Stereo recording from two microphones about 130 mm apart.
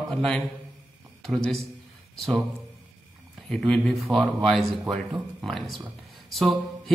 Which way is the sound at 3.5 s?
5° left (ahead or behind).